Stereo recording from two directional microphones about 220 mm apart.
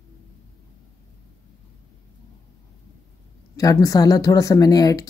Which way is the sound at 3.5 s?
15° left (ahead or behind).